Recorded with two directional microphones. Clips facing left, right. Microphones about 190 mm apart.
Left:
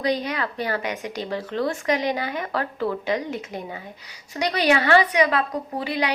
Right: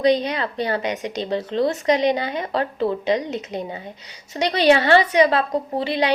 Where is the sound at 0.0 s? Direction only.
20° right (ahead or behind).